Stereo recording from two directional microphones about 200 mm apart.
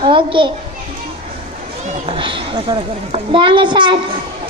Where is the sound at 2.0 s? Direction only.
25° right (ahead or behind).